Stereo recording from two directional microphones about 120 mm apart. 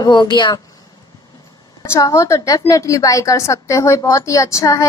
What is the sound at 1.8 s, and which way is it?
A woman's voice, 25° left (ahead or behind).